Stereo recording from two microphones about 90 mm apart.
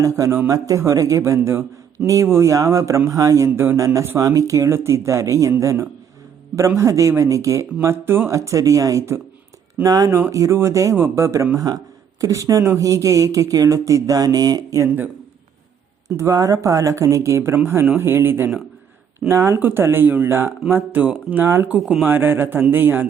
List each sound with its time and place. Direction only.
0.0 s speech: 35° right (ahead or behind)
1.4 s speech: 25° right (ahead or behind); by 14.8 s 45° right (ahead or behind)
14.8 s speech: 20° right (ahead or behind)
16.0 s speech: 35° right (ahead or behind)